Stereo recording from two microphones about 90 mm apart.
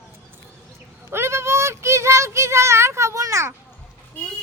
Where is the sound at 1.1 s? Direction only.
30° right (ahead or behind).